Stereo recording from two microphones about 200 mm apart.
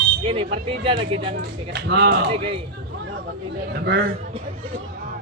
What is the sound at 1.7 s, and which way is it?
Speech, 60° right (ahead or behind).